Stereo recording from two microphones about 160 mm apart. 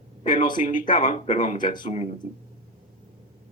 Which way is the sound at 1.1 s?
45° left (ahead or behind).